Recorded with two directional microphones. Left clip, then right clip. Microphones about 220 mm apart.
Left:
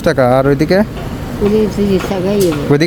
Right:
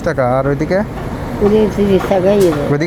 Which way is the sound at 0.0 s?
35° left (ahead or behind).